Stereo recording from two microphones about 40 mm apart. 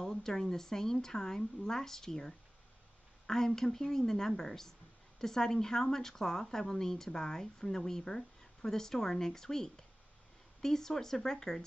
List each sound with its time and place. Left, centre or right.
0.0 s speech: centre